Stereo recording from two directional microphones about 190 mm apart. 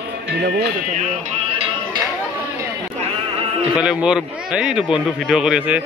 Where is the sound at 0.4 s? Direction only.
60° right (ahead or behind).